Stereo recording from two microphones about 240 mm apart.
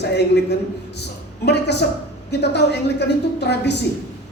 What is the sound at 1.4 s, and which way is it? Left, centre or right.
A man's voice, left.